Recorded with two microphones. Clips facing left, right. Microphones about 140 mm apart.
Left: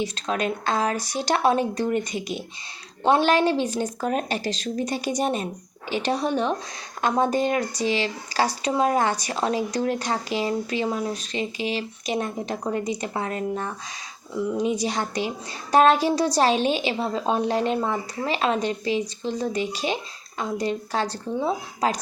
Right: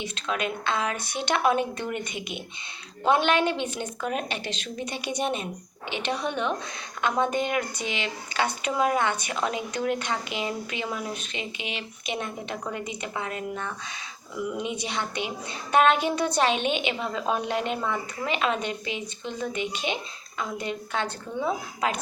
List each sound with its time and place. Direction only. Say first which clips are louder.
0.0 s speech: left 4 dB; 40° left (ahead or behind)